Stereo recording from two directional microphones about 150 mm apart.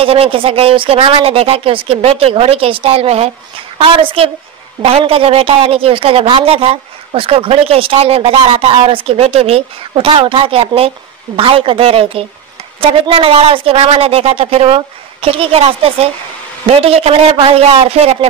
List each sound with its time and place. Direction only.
0.0 s speech: 35° right (ahead or behind)